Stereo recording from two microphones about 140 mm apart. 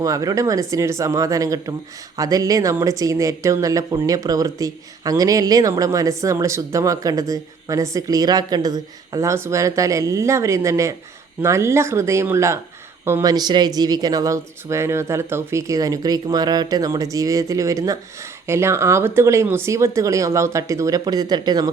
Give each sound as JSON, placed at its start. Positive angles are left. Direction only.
{"t": 0.0, "sound": "speech", "side_deg": -25}